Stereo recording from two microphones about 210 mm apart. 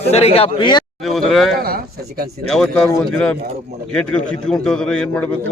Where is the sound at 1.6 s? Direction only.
45° right (ahead or behind).